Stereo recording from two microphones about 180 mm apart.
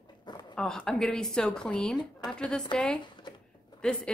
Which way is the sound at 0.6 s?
5° left (ahead or behind).